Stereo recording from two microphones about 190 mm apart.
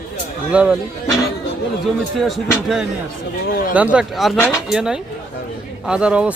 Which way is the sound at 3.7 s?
5° right (ahead or behind).